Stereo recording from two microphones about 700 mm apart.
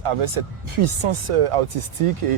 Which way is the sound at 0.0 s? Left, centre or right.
Right.